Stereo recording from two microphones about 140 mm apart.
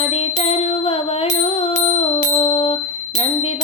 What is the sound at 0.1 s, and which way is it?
Music, 45° left (ahead or behind).